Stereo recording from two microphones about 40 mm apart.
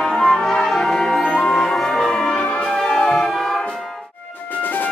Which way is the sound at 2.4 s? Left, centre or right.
Left.